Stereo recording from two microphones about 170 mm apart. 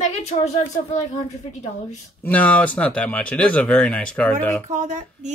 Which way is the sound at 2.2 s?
10° left (ahead or behind).